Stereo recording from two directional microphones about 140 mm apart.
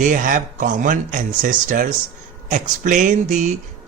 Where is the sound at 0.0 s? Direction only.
65° right (ahead or behind).